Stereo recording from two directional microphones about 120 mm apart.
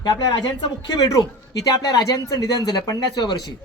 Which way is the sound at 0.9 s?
30° left (ahead or behind).